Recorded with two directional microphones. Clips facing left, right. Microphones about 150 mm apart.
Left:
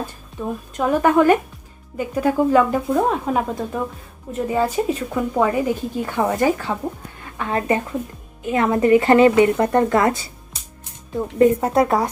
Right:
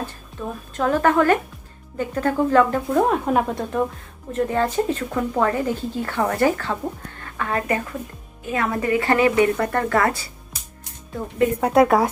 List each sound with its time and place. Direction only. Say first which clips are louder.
0.0 s a woman's voice: left 2 dB; 10° left (ahead or behind)
3.1 s a woman's voice: right 1 dB; centre (ahead or behind); by 10.6 s 20° left (ahead or behind)
11.6 s a woman's voice: right 2 dB; centre (ahead or behind)